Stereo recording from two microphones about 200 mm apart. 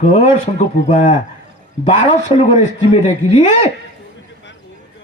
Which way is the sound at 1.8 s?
35° left (ahead or behind).